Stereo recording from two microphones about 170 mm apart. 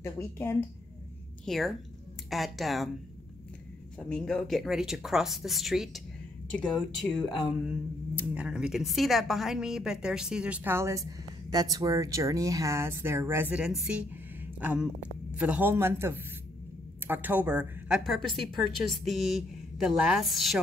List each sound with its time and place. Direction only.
0.0 s a woman's voice: 15° left (ahead or behind)
1.4 s a woman's voice: centre (ahead or behind)
4.1 s speech: 5° left (ahead or behind)
7.6 s speech: 10° right (ahead or behind)